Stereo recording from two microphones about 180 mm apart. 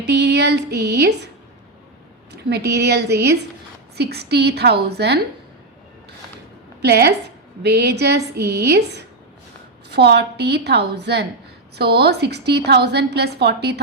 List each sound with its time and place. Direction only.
0.0 s a sound: 65° right (ahead or behind)
2.3 s a woman's voice: 65° right (ahead or behind)
6.8 s a woman's voice: 65° right (ahead or behind)